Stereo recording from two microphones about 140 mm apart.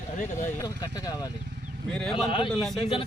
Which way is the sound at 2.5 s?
Centre (ahead or behind).